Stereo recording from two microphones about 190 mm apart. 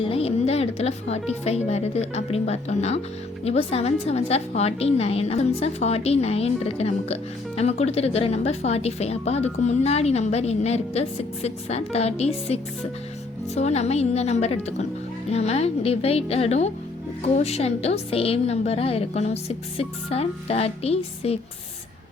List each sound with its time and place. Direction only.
0.0 s a woman's voice: 30° left (ahead or behind)